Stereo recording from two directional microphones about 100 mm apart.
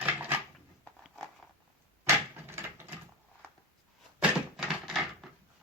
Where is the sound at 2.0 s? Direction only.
25° right (ahead or behind).